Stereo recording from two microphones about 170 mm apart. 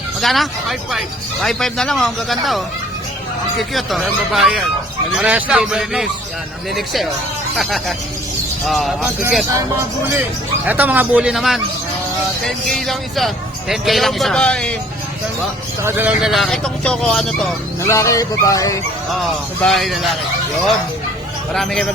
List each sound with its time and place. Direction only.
0.2 s speech: centre (ahead or behind)
9.5 s a man's voice: 15° right (ahead or behind); by 11.6 s centre (ahead or behind)
12.8 s speech: centre (ahead or behind)
15.8 s speech: 15° right (ahead or behind)
17.8 s fowl: 15° left (ahead or behind)
19.6 s speech: centre (ahead or behind)
21.5 s speech: centre (ahead or behind)